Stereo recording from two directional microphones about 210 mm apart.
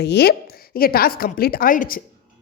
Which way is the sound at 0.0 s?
50° left (ahead or behind).